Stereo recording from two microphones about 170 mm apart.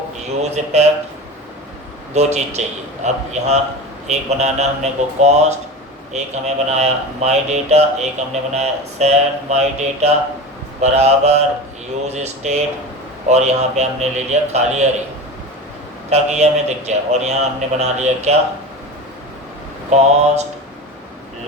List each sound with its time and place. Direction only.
0.4 s speech: 40° right (ahead or behind)
2.1 s speech: 40° right (ahead or behind)
16.0 s speech: 40° right (ahead or behind)
19.9 s speech: 40° right (ahead or behind)